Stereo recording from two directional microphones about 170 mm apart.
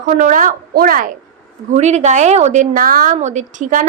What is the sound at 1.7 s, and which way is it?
Speech, 40° right (ahead or behind).